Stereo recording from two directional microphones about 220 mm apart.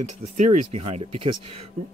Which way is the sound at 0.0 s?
30° right (ahead or behind).